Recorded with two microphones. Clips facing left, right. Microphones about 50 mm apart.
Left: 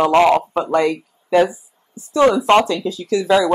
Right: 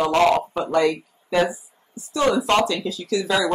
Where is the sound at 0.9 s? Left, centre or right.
Centre.